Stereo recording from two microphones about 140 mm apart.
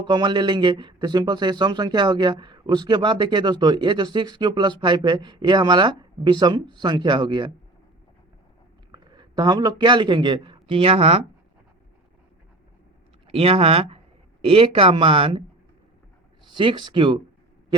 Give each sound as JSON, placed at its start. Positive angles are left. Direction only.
{"t": 0.0, "sound": "speech", "side_deg": -35}
{"t": 8.9, "sound": "a man's voice", "side_deg": -30}
{"t": 13.2, "sound": "speech", "side_deg": -40}
{"t": 16.5, "sound": "speech", "side_deg": -35}